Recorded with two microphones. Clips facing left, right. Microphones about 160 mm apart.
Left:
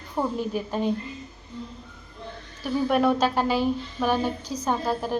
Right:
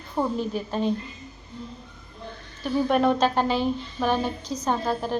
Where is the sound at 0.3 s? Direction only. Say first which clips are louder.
Even; 10° left (ahead or behind).